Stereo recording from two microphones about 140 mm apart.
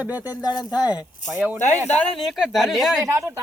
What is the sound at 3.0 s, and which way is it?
Speech, 20° right (ahead or behind).